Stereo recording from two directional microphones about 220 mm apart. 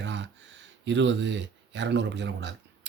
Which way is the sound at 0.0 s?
55° right (ahead or behind).